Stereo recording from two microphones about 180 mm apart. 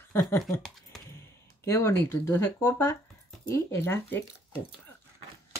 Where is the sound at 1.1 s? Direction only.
15° left (ahead or behind).